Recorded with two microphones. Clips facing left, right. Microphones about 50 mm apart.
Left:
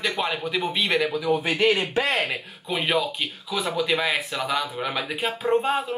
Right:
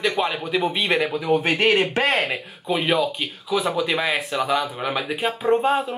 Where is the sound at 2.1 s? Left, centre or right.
Centre.